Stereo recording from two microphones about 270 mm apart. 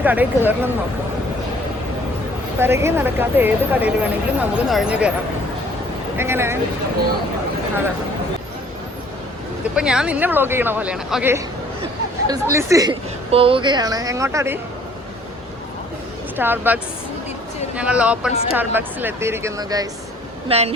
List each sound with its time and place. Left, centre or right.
0.0 s a woman's voice: centre
2.6 s speech: centre
6.1 s a woman's voice: centre
9.7 s a woman's voice: centre
16.4 s a woman's voice: centre